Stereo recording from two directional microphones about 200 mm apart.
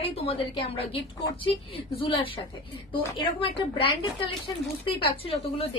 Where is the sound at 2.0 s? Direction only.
25° left (ahead or behind).